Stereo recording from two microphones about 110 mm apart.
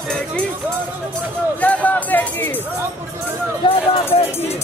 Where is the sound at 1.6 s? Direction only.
15° left (ahead or behind).